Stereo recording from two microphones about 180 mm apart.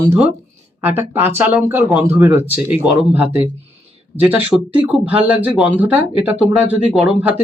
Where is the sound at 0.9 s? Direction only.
10° right (ahead or behind).